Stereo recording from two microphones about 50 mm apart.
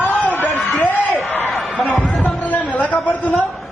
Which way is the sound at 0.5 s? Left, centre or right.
Centre.